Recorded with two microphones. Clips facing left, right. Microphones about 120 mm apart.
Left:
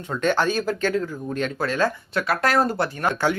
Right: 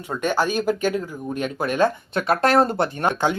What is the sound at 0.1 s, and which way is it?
Speech, 10° right (ahead or behind).